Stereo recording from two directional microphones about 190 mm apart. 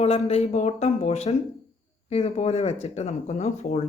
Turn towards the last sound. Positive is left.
turn(degrees=35)  # may be behind; listen again after turning